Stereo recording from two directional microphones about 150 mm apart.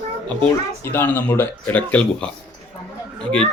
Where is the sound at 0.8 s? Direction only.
15° left (ahead or behind).